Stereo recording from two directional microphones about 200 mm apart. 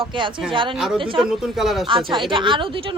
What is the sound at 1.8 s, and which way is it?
A woman's voice, 25° right (ahead or behind).